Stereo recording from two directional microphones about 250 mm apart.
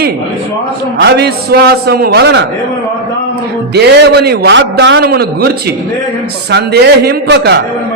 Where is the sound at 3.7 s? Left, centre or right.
Right.